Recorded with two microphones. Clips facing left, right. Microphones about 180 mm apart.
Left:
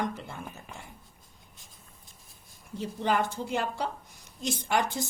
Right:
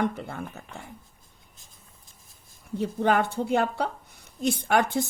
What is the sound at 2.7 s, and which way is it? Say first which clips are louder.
A woman's voice: right 5 dB; 60° right (ahead or behind).